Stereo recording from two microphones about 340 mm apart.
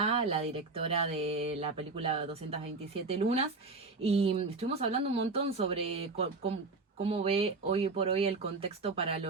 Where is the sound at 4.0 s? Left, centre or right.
Centre.